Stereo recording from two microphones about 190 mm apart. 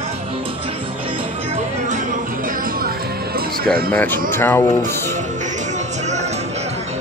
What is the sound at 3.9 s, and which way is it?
Speech, 10° left (ahead or behind).